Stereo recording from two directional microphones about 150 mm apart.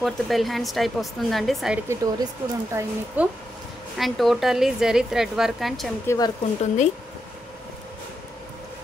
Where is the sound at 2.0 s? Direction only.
25° right (ahead or behind); by 5.9 s centre (ahead or behind).